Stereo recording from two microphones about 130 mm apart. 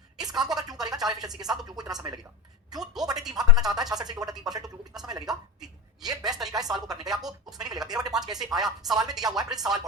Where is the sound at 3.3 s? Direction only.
30° right (ahead or behind).